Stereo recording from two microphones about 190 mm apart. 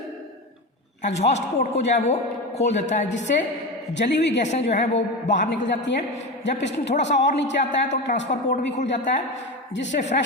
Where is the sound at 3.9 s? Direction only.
65° left (ahead or behind).